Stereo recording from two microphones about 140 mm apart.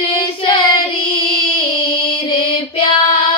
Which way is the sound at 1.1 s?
35° left (ahead or behind).